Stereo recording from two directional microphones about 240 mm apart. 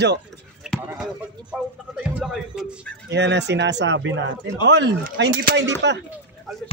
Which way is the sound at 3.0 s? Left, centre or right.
Right.